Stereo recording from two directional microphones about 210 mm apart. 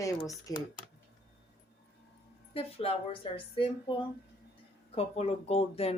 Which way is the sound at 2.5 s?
25° left (ahead or behind).